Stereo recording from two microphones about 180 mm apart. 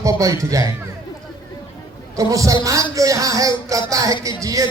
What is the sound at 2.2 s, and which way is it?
A man's voice, 20° right (ahead or behind).